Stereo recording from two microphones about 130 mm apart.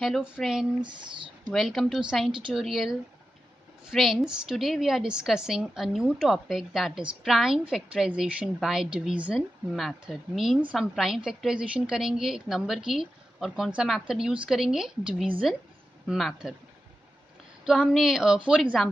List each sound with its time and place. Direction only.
0.0 s a woman's voice: centre (ahead or behind)
0.8 s speech: 40° right (ahead or behind)
1.5 s a woman's voice: centre (ahead or behind)
17.6 s a woman's voice: centre (ahead or behind)